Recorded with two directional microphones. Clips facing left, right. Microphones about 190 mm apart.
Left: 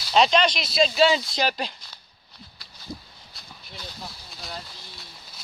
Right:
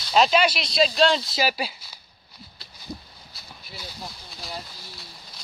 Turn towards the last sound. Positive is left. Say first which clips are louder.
# right 1 dB
turn(degrees=-5)  # may be behind; listen again after turning